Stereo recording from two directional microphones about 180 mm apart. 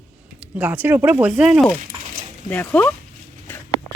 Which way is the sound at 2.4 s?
5° left (ahead or behind).